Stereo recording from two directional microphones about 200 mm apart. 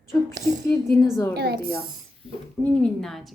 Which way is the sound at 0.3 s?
40° right (ahead or behind).